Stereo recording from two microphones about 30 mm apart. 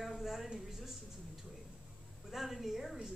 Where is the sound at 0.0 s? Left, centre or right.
Centre.